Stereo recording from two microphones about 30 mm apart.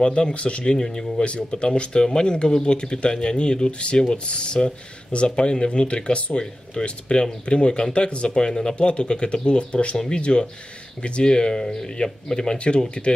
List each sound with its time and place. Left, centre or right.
0.0 s speech: left
0.3 s speech: left
0.7 s speech: left
1.2 s speech: left
2.0 s speech: left
8.7 s speech: left
11.6 s speech: centre
12.0 s speech: left
12.5 s speech: left